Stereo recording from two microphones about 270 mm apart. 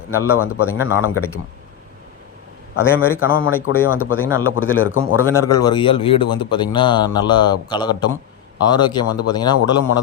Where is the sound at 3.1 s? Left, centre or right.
Left.